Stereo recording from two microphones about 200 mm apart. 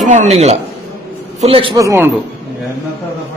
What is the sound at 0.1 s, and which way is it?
A man's voice, 35° right (ahead or behind).